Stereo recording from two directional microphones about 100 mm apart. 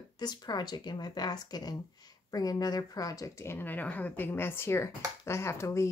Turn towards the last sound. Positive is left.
turn(degrees=30)  # may be behind; listen again after turning